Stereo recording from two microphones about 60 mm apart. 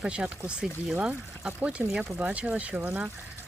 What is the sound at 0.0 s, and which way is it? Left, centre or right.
Speech, centre.